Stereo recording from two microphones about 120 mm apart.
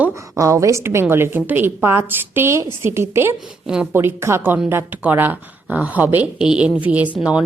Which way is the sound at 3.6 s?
5° right (ahead or behind).